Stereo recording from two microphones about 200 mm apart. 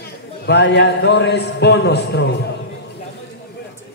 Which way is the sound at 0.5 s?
60° left (ahead or behind).